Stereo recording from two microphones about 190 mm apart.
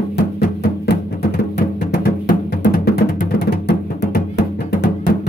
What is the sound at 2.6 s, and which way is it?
Music, 60° left (ahead or behind).